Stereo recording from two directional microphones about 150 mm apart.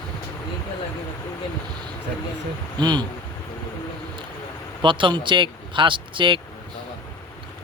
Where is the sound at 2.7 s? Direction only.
30° right (ahead or behind).